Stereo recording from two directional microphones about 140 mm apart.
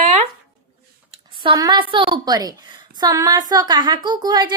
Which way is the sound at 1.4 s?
30° right (ahead or behind).